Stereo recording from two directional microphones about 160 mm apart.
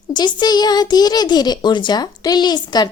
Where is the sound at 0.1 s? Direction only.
25° left (ahead or behind).